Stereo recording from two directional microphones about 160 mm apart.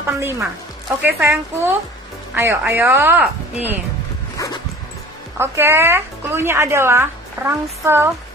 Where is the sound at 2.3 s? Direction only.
15° right (ahead or behind).